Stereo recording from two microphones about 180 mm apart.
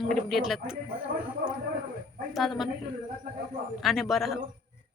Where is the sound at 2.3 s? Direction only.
Centre (ahead or behind).